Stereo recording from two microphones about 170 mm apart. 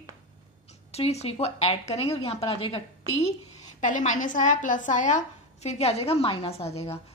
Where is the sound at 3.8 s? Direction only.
45° left (ahead or behind).